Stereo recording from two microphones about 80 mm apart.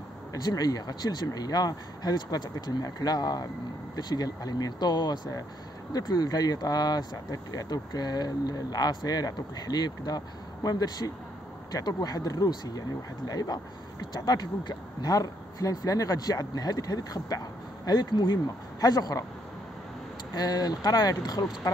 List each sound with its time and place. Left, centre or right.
0.3 s speech: left
17.8 s speech: left
20.3 s speech: left